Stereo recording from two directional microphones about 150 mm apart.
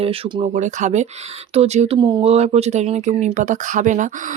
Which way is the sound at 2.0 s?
30° right (ahead or behind).